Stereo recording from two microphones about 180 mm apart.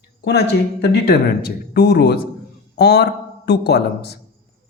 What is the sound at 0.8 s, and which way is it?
A man's voice, 65° left (ahead or behind).